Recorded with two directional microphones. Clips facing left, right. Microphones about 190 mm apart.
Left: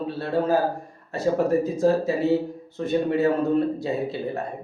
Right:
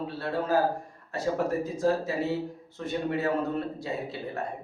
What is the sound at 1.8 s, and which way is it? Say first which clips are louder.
Speech: left 5 dB; 25° left (ahead or behind).